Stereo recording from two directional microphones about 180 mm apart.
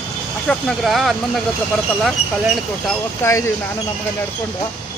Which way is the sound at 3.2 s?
15° left (ahead or behind).